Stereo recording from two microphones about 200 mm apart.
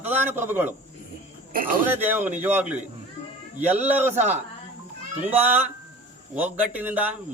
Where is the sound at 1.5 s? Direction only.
45° right (ahead or behind).